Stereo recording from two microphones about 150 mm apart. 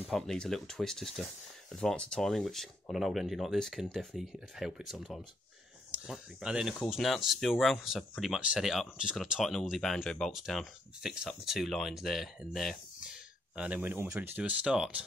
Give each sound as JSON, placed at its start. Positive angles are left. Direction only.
{"t": 0.1, "sound": "speech", "side_deg": 5}